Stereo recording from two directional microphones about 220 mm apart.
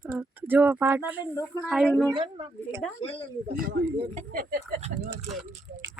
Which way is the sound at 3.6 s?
45° right (ahead or behind).